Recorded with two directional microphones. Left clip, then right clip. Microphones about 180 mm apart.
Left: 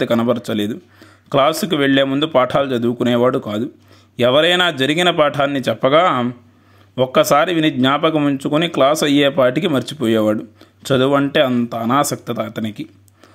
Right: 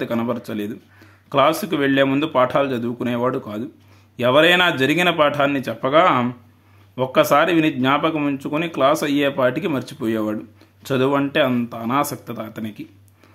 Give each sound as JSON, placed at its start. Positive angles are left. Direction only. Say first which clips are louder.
{"t": 0.0, "sound": "speech", "louder": "left 7 dB", "side_deg": 30}